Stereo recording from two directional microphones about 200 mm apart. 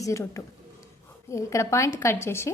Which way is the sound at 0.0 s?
15° left (ahead or behind).